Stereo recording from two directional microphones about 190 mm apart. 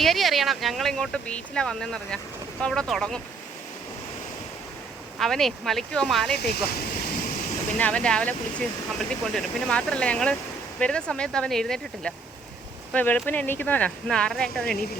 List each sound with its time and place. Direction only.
0.0 s speech: centre (ahead or behind)
5.2 s speech: centre (ahead or behind)
6.3 s speech: 55° left (ahead or behind)
7.8 s speech: 5° left (ahead or behind)